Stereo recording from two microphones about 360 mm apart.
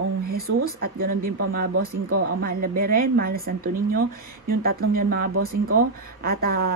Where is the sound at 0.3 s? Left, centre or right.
Right.